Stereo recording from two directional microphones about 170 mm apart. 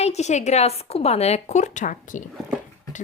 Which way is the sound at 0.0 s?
40° left (ahead or behind).